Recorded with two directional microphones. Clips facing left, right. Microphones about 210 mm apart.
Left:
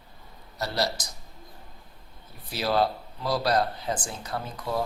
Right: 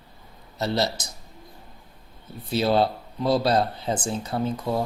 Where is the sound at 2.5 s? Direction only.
25° right (ahead or behind).